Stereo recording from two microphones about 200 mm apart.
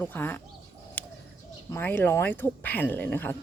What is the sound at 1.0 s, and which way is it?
Bird, 10° left (ahead or behind).